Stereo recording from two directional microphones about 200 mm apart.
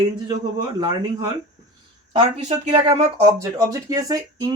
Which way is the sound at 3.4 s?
15° right (ahead or behind).